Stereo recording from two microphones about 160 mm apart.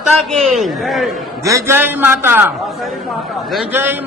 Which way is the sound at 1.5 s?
15° right (ahead or behind).